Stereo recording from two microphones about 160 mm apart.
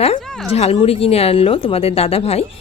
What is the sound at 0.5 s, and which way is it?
Speech, 40° left (ahead or behind).